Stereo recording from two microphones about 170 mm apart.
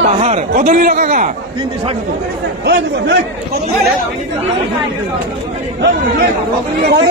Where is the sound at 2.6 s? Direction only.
75° right (ahead or behind).